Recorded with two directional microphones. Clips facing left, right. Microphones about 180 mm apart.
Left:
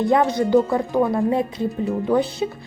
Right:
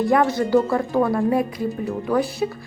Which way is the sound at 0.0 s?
20° left (ahead or behind).